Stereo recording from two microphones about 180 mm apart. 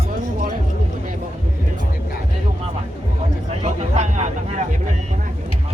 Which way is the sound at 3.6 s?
40° right (ahead or behind).